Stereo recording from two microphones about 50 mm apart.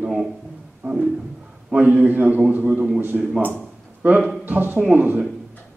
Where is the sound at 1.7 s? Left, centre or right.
Right.